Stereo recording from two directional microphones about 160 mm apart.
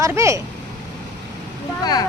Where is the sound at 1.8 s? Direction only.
25° left (ahead or behind).